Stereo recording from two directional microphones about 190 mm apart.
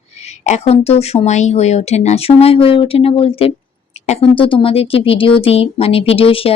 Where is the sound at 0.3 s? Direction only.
35° left (ahead or behind).